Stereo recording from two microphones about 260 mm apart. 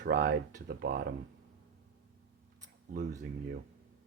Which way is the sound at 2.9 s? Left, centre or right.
Right.